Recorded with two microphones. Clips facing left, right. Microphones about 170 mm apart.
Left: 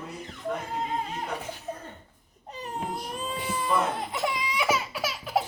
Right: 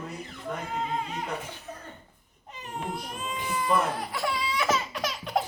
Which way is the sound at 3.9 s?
20° left (ahead or behind).